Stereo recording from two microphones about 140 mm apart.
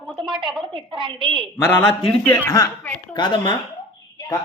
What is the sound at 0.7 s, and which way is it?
Speech, 35° right (ahead or behind).